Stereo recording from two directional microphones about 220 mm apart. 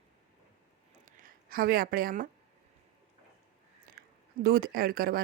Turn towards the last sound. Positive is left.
turn(degrees=-40)  # may be behind; listen again after turning